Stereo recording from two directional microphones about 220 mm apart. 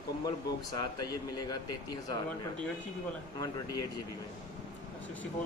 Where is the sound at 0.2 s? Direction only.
15° left (ahead or behind).